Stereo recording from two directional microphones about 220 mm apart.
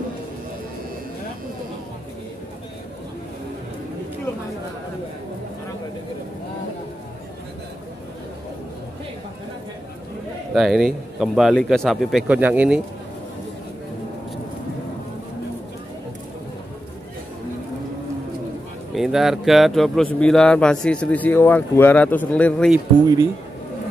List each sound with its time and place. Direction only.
10.5 s speech: centre (ahead or behind)
18.9 s speech: centre (ahead or behind)